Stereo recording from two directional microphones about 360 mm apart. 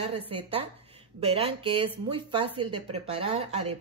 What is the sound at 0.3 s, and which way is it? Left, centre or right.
Speech, centre.